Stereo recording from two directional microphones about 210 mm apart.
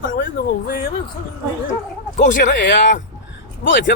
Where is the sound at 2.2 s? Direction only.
40° left (ahead or behind).